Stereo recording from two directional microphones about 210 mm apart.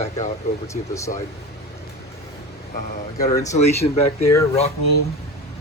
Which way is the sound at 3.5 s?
30° left (ahead or behind).